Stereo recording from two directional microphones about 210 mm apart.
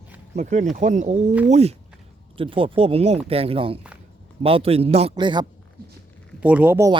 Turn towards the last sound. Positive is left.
turn(degrees=-10)  # may be behind; listen again after turning